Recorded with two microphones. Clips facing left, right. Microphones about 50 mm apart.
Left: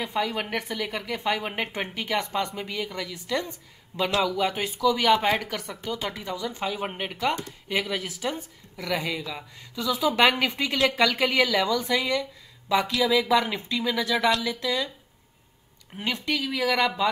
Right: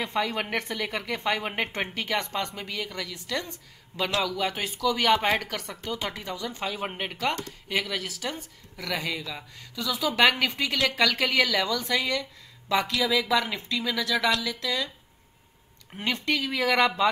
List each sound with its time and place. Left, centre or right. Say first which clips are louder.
0.0 s speech: even; centre
2.0 s a woman's voice: left 3 dB; centre
3.9 s a woman's voice: left 3 dB; centre
4.6 s a woman's voice: left 4 dB; left
5.6 s a woman's voice: left 2 dB; centre
5.9 s speech: left 1 dB; centre
7.6 s a woman's voice: left 1 dB; centre
8.9 s a woman's voice: left 2 dB; centre
9.6 s a woman's voice: left 4 dB; centre
16.0 s speech: right 1 dB; centre